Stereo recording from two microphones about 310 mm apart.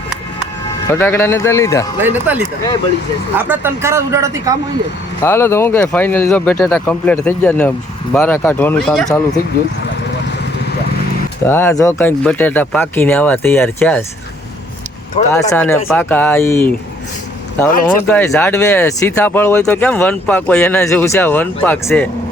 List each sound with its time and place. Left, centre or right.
0.9 s speech: centre
2.0 s speech: centre
5.2 s speech: centre
11.4 s speech: centre
15.3 s speech: centre
18.1 s speech: centre